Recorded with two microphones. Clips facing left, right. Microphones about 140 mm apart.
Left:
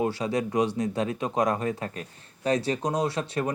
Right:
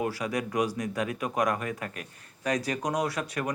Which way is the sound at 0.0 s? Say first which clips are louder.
Left 4 dB; 25° left (ahead or behind).